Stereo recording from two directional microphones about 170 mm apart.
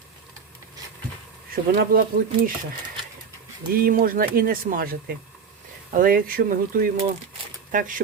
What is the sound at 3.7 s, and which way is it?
Speech, 60° right (ahead or behind).